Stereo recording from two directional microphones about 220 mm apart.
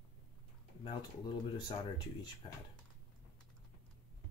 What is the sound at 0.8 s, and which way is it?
Speech, 20° left (ahead or behind).